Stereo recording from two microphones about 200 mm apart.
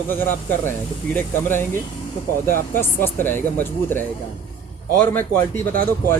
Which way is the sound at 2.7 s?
10° left (ahead or behind).